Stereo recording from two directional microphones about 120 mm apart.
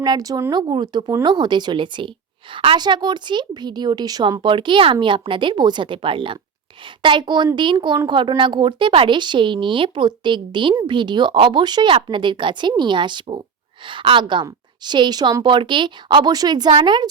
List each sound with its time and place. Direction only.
0.0 s a woman's voice: 35° right (ahead or behind)